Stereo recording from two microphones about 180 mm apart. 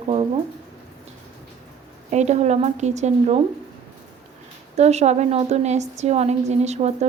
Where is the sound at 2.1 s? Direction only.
40° right (ahead or behind).